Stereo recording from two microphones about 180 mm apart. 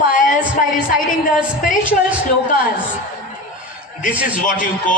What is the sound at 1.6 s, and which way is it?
Speech, 45° left (ahead or behind).